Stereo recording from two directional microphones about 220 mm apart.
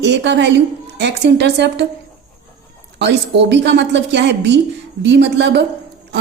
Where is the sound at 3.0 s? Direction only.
50° right (ahead or behind).